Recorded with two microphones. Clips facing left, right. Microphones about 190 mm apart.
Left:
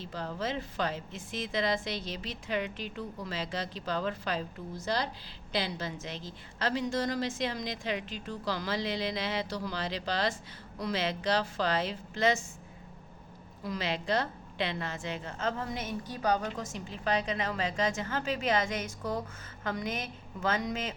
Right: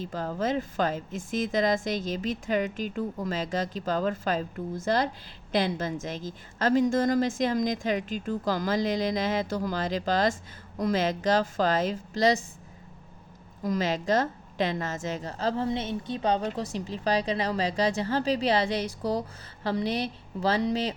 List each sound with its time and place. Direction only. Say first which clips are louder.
0.0 s a woman's voice: right 6 dB; 45° right (ahead or behind)
13.6 s a woman's voice: right 7 dB; 45° right (ahead or behind)